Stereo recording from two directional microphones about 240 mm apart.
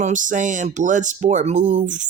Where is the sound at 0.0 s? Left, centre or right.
Right.